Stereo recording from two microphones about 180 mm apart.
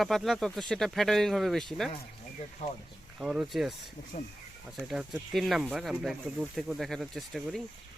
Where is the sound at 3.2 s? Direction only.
5° right (ahead or behind).